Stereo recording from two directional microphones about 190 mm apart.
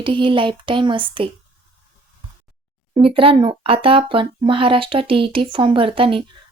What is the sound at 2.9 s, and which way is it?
Speech, 30° right (ahead or behind).